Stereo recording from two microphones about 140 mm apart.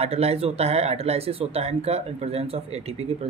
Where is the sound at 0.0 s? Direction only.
45° right (ahead or behind).